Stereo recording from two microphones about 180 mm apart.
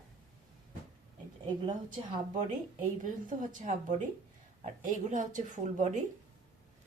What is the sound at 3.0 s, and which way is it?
Speech, 45° right (ahead or behind).